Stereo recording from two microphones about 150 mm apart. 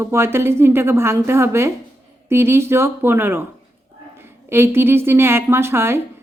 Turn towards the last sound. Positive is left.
turn(degrees=-15)  # may be behind; listen again after turning